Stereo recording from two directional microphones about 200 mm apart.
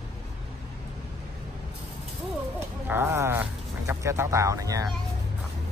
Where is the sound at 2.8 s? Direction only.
10° right (ahead or behind).